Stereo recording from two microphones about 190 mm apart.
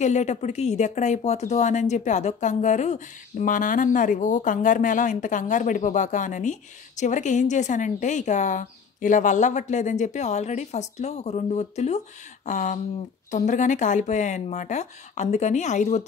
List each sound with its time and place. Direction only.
0.0 s speech: 35° left (ahead or behind)